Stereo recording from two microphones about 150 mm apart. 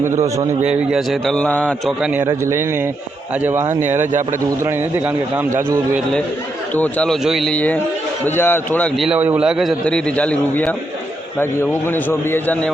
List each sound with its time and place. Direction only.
0.7 s a man's voice: 5° right (ahead or behind)
2.2 s a man's voice: 20° right (ahead or behind)
6.7 s a man's voice: 10° left (ahead or behind)
9.0 s a man's voice: 5° right (ahead or behind)
9.8 s a man's voice: 5° left (ahead or behind)